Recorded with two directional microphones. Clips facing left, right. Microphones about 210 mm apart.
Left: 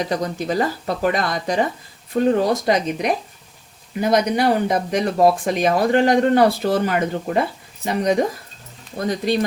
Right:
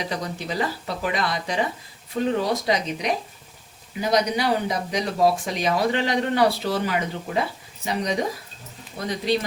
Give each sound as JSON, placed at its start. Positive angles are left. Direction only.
{"t": 0.0, "sound": "speech", "side_deg": 45}